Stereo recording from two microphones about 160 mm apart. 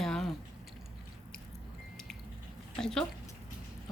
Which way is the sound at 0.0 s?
Centre (ahead or behind).